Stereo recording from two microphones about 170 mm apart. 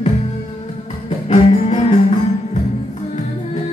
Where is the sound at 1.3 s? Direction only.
35° left (ahead or behind).